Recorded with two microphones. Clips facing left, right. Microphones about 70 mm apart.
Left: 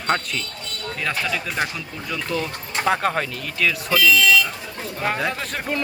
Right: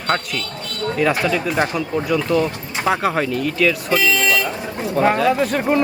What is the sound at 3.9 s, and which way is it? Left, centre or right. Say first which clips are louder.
Speech: even; right.